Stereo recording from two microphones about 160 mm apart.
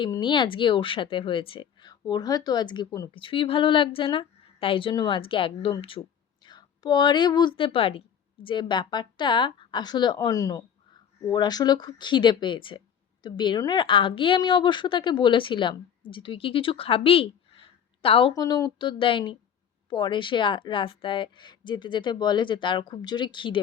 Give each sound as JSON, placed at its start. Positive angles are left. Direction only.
{"t": 0.1, "sound": "a woman's voice", "side_deg": 30}